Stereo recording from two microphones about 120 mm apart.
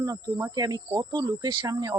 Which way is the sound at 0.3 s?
25° right (ahead or behind).